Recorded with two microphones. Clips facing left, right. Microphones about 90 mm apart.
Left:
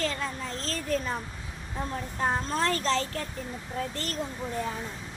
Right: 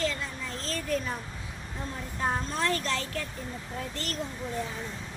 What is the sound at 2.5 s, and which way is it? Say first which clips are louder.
A woman's voice: left 3 dB; 35° left (ahead or behind).